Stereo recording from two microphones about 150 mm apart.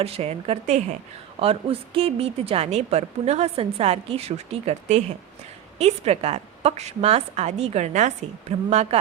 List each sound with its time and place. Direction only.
0.0 s a woman's voice: 40° right (ahead or behind)